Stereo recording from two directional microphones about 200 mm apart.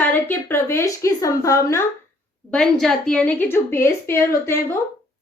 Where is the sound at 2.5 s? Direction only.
5° left (ahead or behind).